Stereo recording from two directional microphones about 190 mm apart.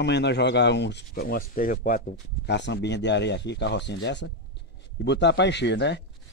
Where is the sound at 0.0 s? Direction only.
65° left (ahead or behind).